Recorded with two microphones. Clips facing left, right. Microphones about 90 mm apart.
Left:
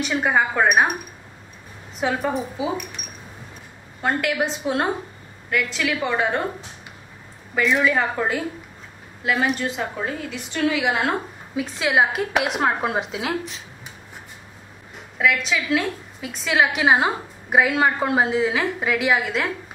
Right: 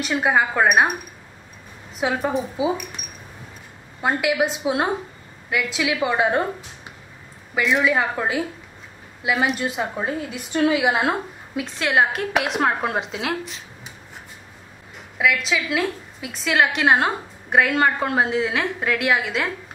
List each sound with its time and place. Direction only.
0.0 s a woman's voice: centre (ahead or behind)
2.0 s a woman's voice: 5° right (ahead or behind)
4.0 s a woman's voice: 10° right (ahead or behind)
7.5 s a woman's voice: 5° right (ahead or behind)
11.5 s a woman's voice: centre (ahead or behind)
15.1 s a woman's voice: centre (ahead or behind)